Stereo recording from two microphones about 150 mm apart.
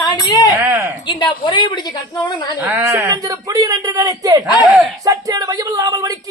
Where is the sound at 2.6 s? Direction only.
10° right (ahead or behind).